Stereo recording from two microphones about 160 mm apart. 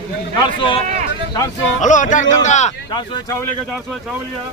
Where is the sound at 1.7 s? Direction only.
50° left (ahead or behind).